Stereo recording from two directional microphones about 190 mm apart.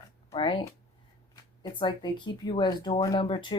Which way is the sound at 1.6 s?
25° left (ahead or behind).